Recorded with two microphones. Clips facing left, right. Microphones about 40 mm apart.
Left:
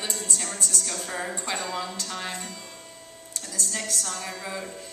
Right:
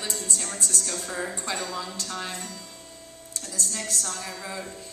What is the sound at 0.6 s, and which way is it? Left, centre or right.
Speech, right.